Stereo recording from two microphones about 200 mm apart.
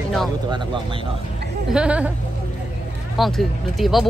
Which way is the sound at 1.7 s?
5° right (ahead or behind).